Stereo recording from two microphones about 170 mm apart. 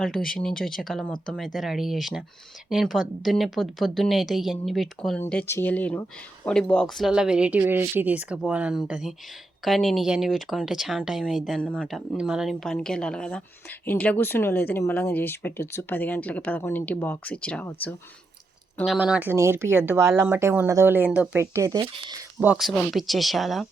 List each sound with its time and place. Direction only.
0.0 s speech: 5° left (ahead or behind)
18.9 s speech: 5° right (ahead or behind); by 22.2 s 25° right (ahead or behind)
22.4 s speech: 5° right (ahead or behind)